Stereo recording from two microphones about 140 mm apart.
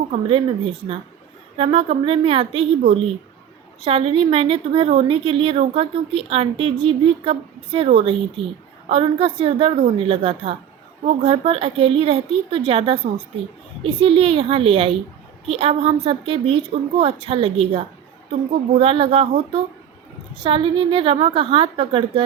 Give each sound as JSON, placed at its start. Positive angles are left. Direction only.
{"t": 0.1, "sound": "a woman's voice", "side_deg": -40}
{"t": 3.8, "sound": "a woman's voice", "side_deg": -40}
{"t": 8.4, "sound": "a woman's voice", "side_deg": 0}
{"t": 8.9, "sound": "a woman's voice", "side_deg": -40}
{"t": 20.4, "sound": "a woman's voice", "side_deg": -40}